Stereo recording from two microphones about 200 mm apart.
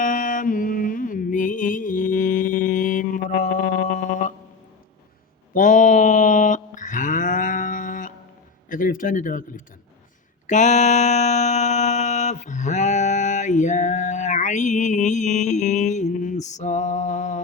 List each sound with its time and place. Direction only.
0.0 s music: 40° left (ahead or behind)
5.5 s a sound: 40° left (ahead or behind)
8.7 s speech: 40° left (ahead or behind)
10.4 s mantra: 35° left (ahead or behind)